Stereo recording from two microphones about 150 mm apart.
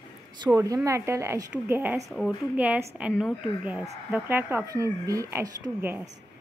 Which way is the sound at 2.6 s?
10° right (ahead or behind).